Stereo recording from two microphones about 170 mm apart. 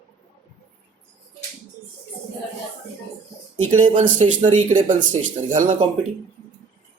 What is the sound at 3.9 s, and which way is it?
Speech, 50° right (ahead or behind).